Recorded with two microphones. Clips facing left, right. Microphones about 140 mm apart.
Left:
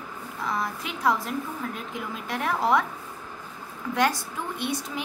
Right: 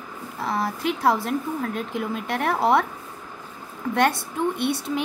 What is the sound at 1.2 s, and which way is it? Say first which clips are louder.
A woman's voice: right 5 dB; 70° right (ahead or behind).